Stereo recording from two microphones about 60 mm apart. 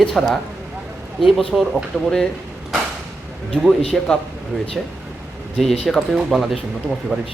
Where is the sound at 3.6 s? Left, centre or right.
Centre.